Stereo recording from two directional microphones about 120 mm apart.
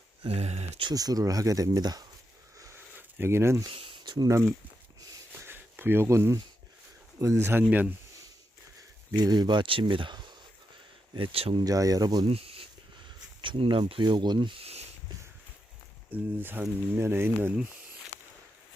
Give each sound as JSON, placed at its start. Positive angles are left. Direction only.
{"t": 0.3, "sound": "speech", "side_deg": -65}
{"t": 0.8, "sound": "speech", "side_deg": -35}
{"t": 3.2, "sound": "speech", "side_deg": -20}
{"t": 4.0, "sound": "speech", "side_deg": -35}
{"t": 5.4, "sound": "a sound", "side_deg": -15}
{"t": 7.2, "sound": "speech", "side_deg": -25}
{"t": 9.1, "sound": "speech", "side_deg": -35}
{"t": 11.6, "sound": "speech", "side_deg": -30}
{"t": 12.3, "sound": "speech", "side_deg": -55}
{"t": 13.4, "sound": "speech", "side_deg": -45}
{"t": 14.6, "sound": "a sound", "side_deg": -60}
{"t": 16.1, "sound": "speech", "side_deg": -15}